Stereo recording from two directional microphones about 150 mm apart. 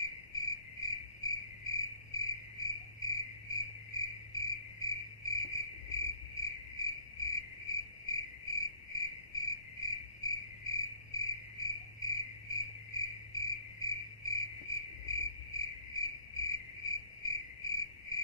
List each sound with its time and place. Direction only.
0.3 s cricket: 25° left (ahead or behind)
17.6 s cricket: 20° left (ahead or behind)